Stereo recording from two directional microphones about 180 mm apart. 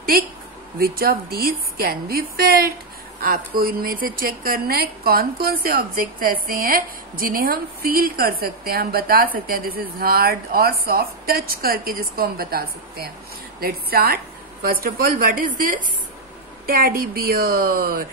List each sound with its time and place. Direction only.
0.1 s a woman's voice: 55° right (ahead or behind)